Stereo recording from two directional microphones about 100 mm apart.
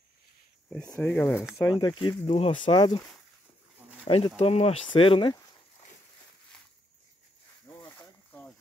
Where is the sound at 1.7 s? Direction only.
50° left (ahead or behind).